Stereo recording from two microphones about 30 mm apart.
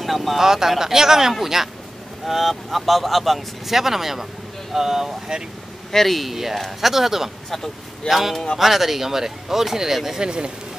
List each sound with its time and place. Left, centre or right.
0.0 s speech: centre
0.4 s speech: centre
2.2 s speech: centre
5.9 s speech: centre
6.3 s speech: centre
10.2 s speech: right